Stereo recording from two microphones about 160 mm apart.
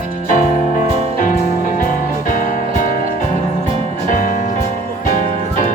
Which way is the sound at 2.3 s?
55° left (ahead or behind).